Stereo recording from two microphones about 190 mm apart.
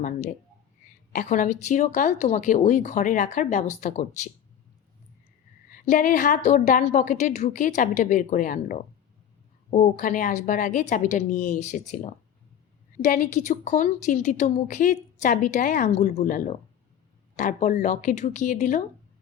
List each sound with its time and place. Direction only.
0.0 s a woman's voice: 45° left (ahead or behind)
5.7 s a woman's voice: 45° left (ahead or behind)